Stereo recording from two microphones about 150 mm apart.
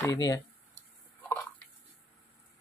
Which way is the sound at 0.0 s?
25° left (ahead or behind).